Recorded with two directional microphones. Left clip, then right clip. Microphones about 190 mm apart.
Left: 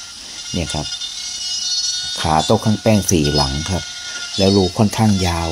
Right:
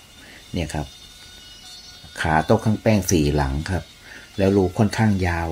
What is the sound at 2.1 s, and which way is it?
Speech, 15° left (ahead or behind).